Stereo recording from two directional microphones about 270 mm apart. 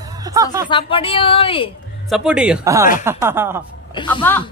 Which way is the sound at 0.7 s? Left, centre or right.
Centre.